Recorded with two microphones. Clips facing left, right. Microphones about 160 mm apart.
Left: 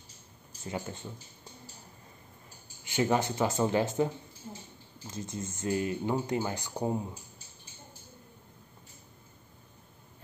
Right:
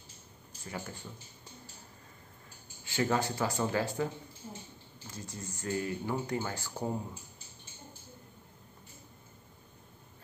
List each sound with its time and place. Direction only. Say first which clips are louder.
0.7 s speech: left 5 dB; 20° left (ahead or behind)
2.8 s speech: left 3 dB; 20° left (ahead or behind)